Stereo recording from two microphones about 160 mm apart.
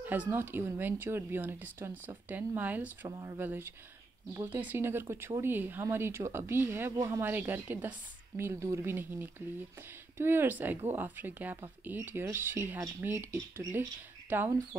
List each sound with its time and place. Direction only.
0.0 s speech: 10° right (ahead or behind)